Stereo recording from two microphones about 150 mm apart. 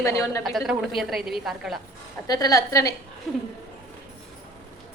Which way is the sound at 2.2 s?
25° left (ahead or behind).